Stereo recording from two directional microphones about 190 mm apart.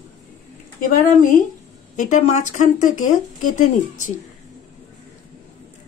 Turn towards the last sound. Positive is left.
turn(degrees=40)  # may be behind; listen again after turning